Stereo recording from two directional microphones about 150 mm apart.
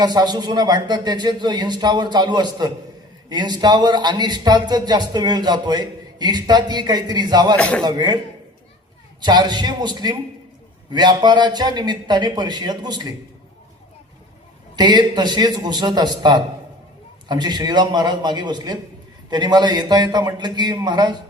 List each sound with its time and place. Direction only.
0.0 s a man's voice: 30° right (ahead or behind)
7.5 s a man's voice: 5° left (ahead or behind)
7.9 s a man's voice: 30° right (ahead or behind)
9.2 s a man's voice: 30° right (ahead or behind)
14.8 s a man's voice: 30° right (ahead or behind)